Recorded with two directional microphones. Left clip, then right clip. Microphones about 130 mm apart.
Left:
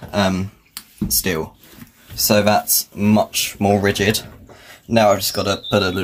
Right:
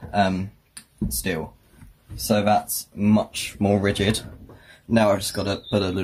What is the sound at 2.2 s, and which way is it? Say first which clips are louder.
Speech: left 5 dB; 30° left (ahead or behind).